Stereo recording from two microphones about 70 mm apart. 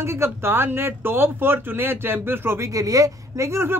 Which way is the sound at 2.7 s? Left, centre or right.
Right.